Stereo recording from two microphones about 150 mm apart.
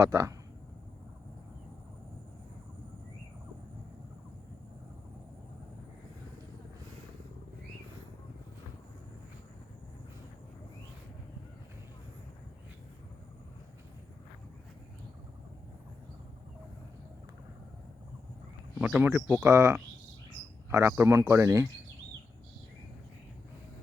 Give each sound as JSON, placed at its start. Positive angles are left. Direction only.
{"t": 0.1, "sound": "speech", "side_deg": -20}
{"t": 18.8, "sound": "speech", "side_deg": -10}